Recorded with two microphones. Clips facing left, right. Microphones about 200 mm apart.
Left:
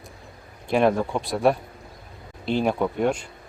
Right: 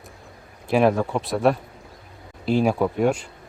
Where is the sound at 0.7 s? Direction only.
5° right (ahead or behind).